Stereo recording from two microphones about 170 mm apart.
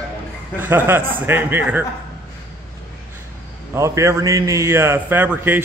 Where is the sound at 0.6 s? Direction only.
10° right (ahead or behind).